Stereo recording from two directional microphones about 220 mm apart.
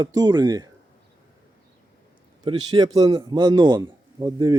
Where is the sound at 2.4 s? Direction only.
20° right (ahead or behind).